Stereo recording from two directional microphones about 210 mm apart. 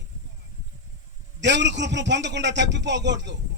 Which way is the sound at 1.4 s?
55° right (ahead or behind).